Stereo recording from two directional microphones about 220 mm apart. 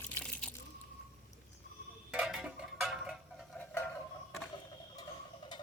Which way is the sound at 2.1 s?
5° right (ahead or behind).